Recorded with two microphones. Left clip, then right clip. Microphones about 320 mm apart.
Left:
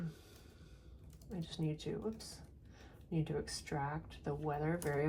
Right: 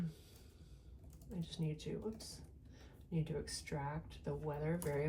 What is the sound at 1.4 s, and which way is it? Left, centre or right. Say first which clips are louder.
Speech: left 4 dB; centre.